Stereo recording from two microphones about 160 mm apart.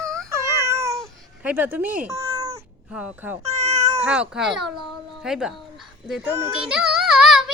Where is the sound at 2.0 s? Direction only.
20° right (ahead or behind).